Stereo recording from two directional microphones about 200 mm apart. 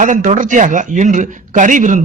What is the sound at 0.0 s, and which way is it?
A man's voice, 40° right (ahead or behind).